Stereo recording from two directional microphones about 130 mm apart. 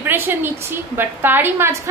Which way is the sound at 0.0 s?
15° right (ahead or behind).